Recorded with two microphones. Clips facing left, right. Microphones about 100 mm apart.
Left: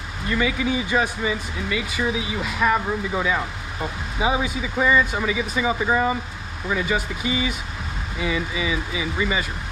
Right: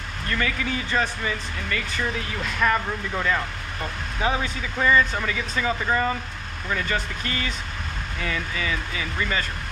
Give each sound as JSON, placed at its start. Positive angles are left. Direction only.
{"t": 0.3, "sound": "speech", "side_deg": 10}